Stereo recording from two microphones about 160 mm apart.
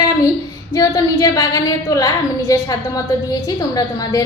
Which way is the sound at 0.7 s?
25° left (ahead or behind).